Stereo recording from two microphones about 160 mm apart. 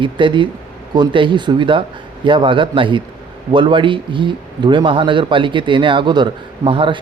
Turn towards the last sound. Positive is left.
turn(degrees=-30)  # may be behind; listen again after turning